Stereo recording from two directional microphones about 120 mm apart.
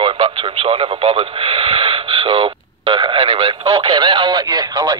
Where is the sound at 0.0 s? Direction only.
40° right (ahead or behind).